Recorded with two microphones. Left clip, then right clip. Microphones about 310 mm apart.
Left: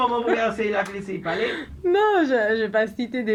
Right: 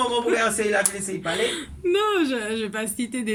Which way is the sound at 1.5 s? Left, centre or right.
Centre.